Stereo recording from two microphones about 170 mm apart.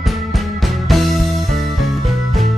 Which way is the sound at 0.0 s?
Centre (ahead or behind).